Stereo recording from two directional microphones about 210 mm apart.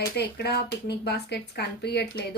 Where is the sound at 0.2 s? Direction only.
50° left (ahead or behind).